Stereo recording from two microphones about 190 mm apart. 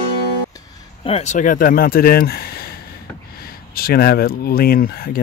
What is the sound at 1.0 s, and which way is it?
Speech, 35° left (ahead or behind).